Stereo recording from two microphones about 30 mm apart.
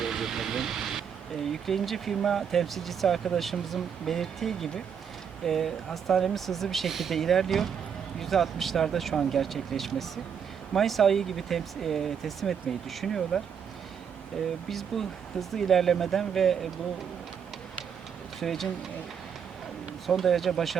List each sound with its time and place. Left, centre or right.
0.0 s vehicle: centre
1.6 s speech: centre
6.9 s speech: centre
7.2 s speech: centre
14.7 s speech: centre
18.3 s speech: centre
20.1 s speech: centre